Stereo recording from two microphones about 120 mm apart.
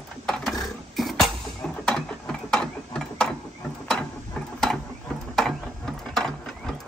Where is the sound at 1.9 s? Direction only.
5° left (ahead or behind).